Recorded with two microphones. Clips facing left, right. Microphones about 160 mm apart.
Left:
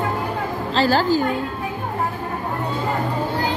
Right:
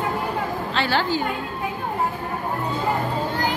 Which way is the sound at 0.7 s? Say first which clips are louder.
Left 6 dB; 40° left (ahead or behind).